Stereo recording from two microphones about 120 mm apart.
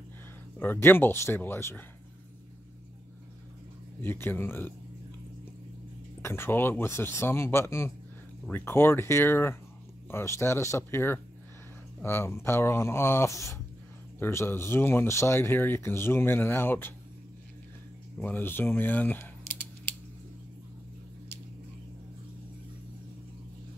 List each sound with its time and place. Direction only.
0.6 s speech: 15° left (ahead or behind)
4.0 s speech: 20° left (ahead or behind)
6.2 s speech: 20° left (ahead or behind)
18.1 s speech: 15° left (ahead or behind)